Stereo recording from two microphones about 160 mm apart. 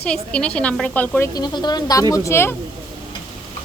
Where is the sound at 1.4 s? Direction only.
25° left (ahead or behind).